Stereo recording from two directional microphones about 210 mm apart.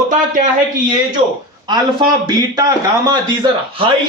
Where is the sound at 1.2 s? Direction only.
30° right (ahead or behind).